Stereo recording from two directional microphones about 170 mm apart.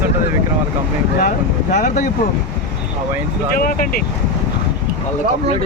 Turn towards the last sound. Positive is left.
turn(degrees=55)  # may be behind; listen again after turning